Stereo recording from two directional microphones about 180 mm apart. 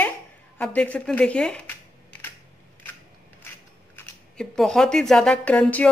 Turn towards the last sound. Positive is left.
turn(degrees=10)  # may be behind; listen again after turning